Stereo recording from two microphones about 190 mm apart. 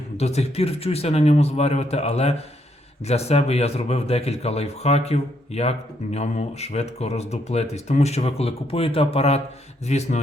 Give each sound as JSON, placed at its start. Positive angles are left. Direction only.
{"t": 0.2, "sound": "a man's voice", "side_deg": 35}